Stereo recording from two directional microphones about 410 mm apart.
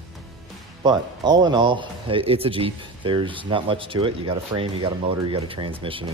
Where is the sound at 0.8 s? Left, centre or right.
Centre.